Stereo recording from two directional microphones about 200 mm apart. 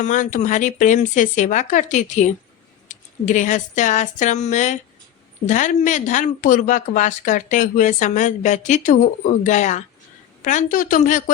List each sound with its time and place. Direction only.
0.0 s speech: 40° left (ahead or behind)